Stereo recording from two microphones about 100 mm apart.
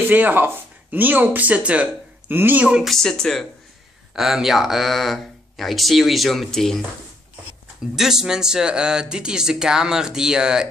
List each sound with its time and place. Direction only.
0.1 s speech: 20° right (ahead or behind)
2.9 s speech: 5° left (ahead or behind)
7.9 s speech: 5° right (ahead or behind)